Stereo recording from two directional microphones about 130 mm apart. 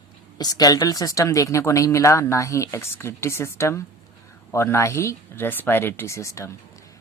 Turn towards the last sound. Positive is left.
turn(degrees=25)  # may be behind; listen again after turning